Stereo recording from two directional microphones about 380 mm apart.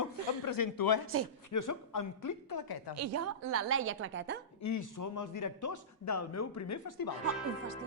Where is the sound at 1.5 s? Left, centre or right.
Left.